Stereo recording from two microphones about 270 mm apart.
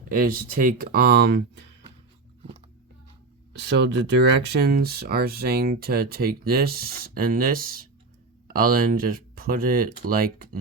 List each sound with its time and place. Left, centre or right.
0.1 s speech: right
3.7 s speech: right